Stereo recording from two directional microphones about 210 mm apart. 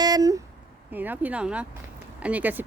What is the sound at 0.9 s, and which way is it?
A woman's voice, 10° right (ahead or behind).